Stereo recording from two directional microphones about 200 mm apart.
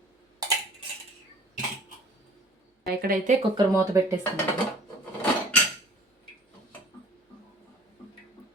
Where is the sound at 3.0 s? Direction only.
40° right (ahead or behind).